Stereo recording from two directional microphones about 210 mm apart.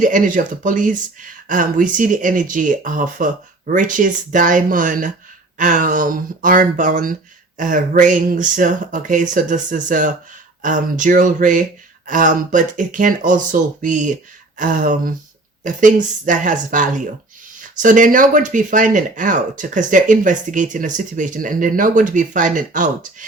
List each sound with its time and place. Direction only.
0.0 s speech: 40° right (ahead or behind)
16.2 s speech: 40° right (ahead or behind)